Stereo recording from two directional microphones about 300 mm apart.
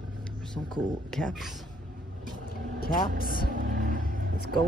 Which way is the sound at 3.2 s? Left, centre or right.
Left.